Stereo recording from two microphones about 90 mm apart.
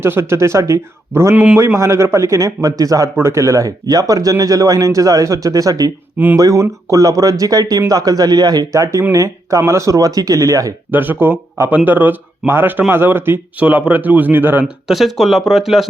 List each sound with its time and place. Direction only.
0.0 s speech: 30° right (ahead or behind)
10.9 s speech: 20° right (ahead or behind)
14.8 s speech: centre (ahead or behind)